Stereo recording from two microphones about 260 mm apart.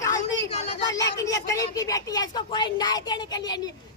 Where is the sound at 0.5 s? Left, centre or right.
Left.